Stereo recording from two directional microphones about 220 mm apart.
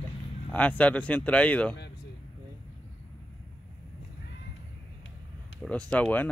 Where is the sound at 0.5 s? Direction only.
5° left (ahead or behind).